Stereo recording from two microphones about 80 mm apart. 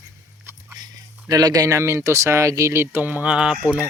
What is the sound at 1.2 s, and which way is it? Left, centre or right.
Speech, right.